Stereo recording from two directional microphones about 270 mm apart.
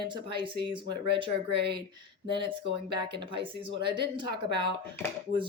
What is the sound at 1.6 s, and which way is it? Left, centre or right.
Speech, right.